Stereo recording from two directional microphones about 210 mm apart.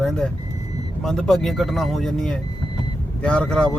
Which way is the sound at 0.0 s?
Centre (ahead or behind).